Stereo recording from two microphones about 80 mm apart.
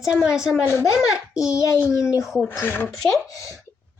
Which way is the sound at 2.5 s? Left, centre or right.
Left.